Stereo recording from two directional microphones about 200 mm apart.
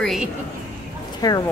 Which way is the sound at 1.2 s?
20° left (ahead or behind).